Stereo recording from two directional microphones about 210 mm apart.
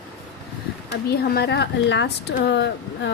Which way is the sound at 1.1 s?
50° left (ahead or behind).